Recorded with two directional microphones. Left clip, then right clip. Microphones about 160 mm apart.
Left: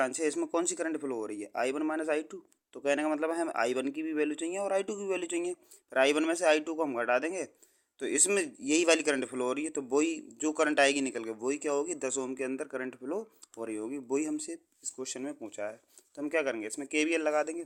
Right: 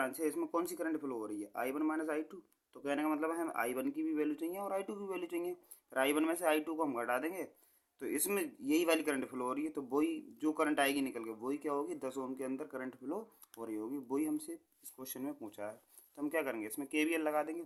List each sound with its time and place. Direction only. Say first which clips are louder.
0.0 s speech: left 6 dB; 50° left (ahead or behind)